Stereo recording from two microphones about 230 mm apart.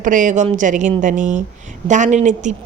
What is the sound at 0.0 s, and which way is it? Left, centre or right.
Speech, right.